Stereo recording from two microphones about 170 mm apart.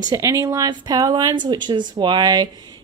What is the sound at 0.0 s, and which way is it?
Speech, 20° right (ahead or behind).